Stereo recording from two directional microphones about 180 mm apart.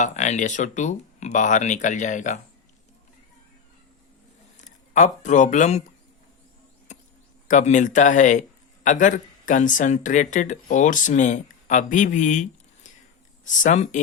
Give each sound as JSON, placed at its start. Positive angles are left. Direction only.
{"t": 0.0, "sound": "speech", "side_deg": 40}
{"t": 4.5, "sound": "speech", "side_deg": 45}
{"t": 6.9, "sound": "a sound", "side_deg": 40}
{"t": 7.4, "sound": "speech", "side_deg": 45}